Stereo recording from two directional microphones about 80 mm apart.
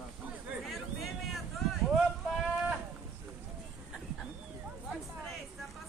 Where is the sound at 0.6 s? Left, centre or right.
Centre.